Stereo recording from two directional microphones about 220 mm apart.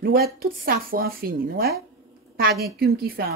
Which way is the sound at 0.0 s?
45° right (ahead or behind).